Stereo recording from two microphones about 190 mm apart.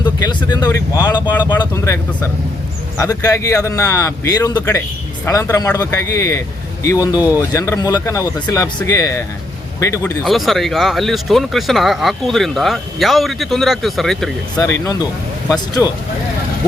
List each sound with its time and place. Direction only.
0.0 s a man's voice: 20° left (ahead or behind)
10.2 s speech: centre (ahead or behind)
14.6 s a man's voice: 15° left (ahead or behind)